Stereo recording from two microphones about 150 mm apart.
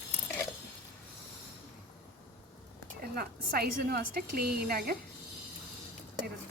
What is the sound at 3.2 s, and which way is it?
A woman's voice, 90° right.